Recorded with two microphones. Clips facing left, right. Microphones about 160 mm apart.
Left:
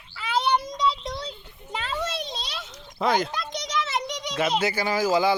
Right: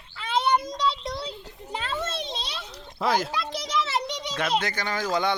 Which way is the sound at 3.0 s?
Centre (ahead or behind).